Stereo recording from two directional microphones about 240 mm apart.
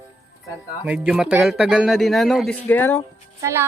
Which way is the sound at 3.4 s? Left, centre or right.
Centre.